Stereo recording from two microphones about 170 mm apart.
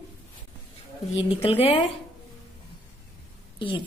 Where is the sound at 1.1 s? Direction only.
35° left (ahead or behind).